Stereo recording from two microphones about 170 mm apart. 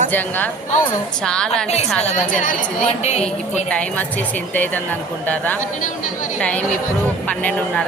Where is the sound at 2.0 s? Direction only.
50° left (ahead or behind).